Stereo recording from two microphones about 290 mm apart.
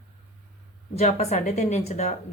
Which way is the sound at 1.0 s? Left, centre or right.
Left.